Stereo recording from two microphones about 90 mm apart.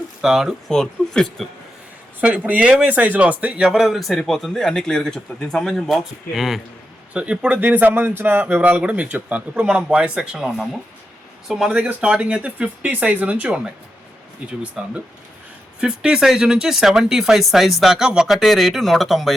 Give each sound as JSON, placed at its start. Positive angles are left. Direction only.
{"t": 0.2, "sound": "a man's voice", "side_deg": -5}
{"t": 0.7, "sound": "speech", "side_deg": 5}
{"t": 2.2, "sound": "a man's voice", "side_deg": -15}
{"t": 7.1, "sound": "speech", "side_deg": -15}
{"t": 14.8, "sound": "a man's voice", "side_deg": -5}